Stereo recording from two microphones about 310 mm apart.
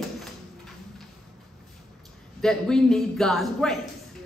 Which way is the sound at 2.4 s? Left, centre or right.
Centre.